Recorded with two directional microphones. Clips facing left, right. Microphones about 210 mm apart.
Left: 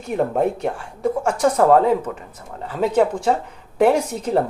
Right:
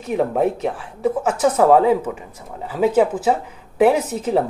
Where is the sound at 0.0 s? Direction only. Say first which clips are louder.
Right 1 dB; centre (ahead or behind).